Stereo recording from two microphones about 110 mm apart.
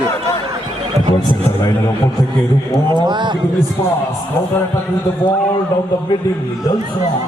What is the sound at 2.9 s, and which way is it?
Speech, 45° right (ahead or behind).